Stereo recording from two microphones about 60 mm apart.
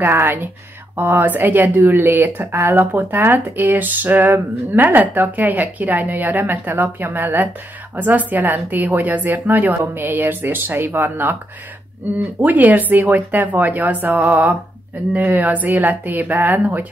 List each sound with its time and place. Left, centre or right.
0.0 s speech: right
12.4 s speech: right